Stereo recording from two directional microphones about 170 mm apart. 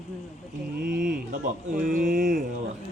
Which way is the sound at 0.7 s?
55° right (ahead or behind).